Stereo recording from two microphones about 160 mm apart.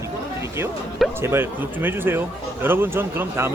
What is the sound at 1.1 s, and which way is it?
Speech, 15° right (ahead or behind).